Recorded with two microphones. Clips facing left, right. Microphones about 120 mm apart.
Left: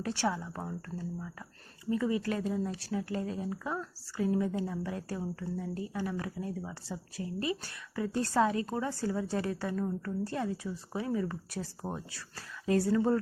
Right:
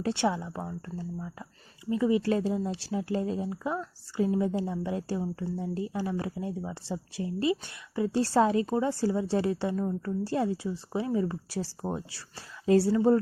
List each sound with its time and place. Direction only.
0.0 s speech: 25° right (ahead or behind)
0.9 s speech: centre (ahead or behind)
1.9 s speech: 20° right (ahead or behind)